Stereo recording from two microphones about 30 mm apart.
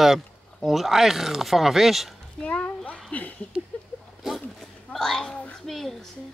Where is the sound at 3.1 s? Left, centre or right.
Left.